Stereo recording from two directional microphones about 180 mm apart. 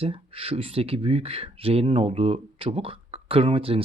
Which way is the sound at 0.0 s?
30° right (ahead or behind).